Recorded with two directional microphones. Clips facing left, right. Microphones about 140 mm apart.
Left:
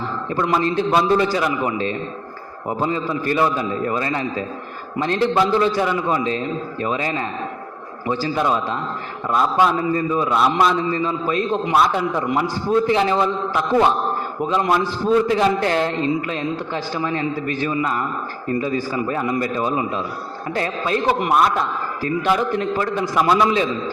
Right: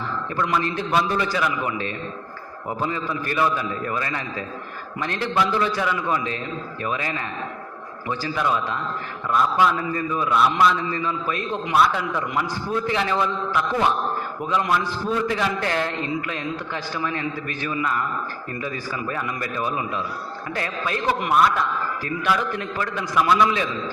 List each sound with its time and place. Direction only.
0.3 s a man's voice: 30° left (ahead or behind)